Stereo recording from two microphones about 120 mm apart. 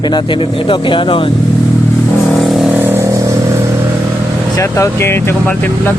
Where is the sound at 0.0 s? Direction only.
40° left (ahead or behind).